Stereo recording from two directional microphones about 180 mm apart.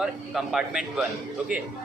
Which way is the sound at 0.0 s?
5° right (ahead or behind).